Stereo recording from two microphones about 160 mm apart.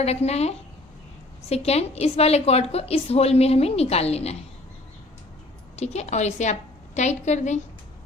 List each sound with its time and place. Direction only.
0.0 s a woman's voice: 40° left (ahead or behind)
5.7 s a woman's voice: 45° left (ahead or behind)